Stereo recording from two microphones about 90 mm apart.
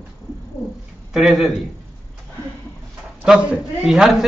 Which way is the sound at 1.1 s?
Centre (ahead or behind).